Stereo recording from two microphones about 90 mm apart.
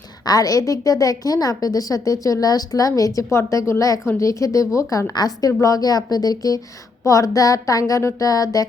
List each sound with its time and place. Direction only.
0.3 s a woman's voice: 45° left (ahead or behind)